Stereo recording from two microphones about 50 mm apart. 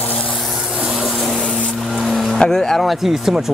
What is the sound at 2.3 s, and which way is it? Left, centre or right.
Speech, centre.